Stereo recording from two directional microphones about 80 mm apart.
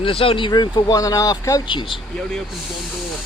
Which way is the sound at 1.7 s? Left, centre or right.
Left.